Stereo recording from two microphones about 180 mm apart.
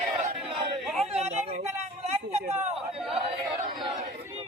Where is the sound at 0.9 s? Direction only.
35° right (ahead or behind).